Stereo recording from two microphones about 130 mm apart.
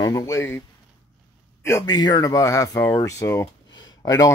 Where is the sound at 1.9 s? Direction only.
30° left (ahead or behind).